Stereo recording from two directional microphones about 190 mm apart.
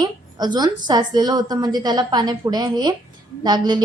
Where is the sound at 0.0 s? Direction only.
20° right (ahead or behind).